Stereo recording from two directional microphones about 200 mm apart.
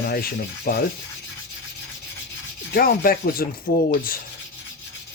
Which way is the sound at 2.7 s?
50° left (ahead or behind).